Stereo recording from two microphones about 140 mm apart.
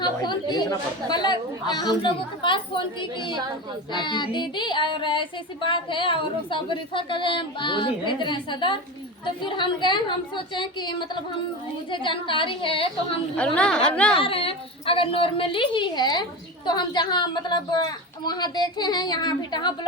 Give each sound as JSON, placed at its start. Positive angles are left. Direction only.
{"t": 0.0, "sound": "chatter", "side_deg": 30}
{"t": 1.1, "sound": "child singing", "side_deg": 30}
{"t": 3.9, "sound": "child singing", "side_deg": 35}
{"t": 13.3, "sound": "a woman's voice", "side_deg": 10}
{"t": 14.2, "sound": "child singing", "side_deg": 40}